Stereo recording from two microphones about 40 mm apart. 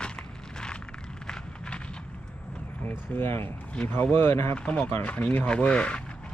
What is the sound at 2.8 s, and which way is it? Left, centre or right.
Speech, left.